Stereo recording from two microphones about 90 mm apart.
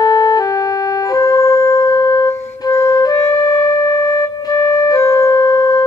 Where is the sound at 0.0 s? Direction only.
45° left (ahead or behind).